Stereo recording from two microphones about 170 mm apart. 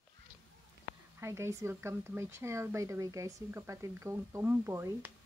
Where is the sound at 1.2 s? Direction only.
15° right (ahead or behind).